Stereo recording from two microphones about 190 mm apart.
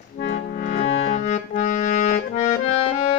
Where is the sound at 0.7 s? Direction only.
45° left (ahead or behind).